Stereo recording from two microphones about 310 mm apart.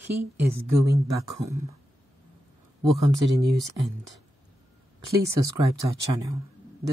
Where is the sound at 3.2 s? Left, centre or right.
Right.